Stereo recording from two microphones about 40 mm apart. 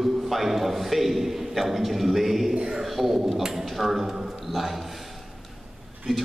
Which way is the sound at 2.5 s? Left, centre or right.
Right.